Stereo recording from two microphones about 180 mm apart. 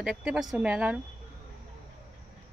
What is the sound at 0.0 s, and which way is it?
Speech, 5° right (ahead or behind).